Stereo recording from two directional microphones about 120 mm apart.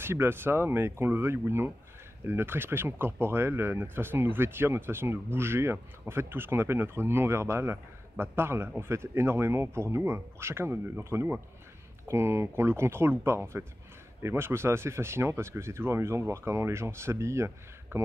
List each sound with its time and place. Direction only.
0.0 s speech: 20° right (ahead or behind)